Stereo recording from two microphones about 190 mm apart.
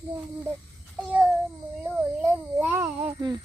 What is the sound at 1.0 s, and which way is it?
Child singing, 10° right (ahead or behind).